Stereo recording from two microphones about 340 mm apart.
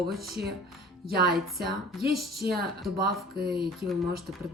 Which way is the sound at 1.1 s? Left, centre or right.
Right.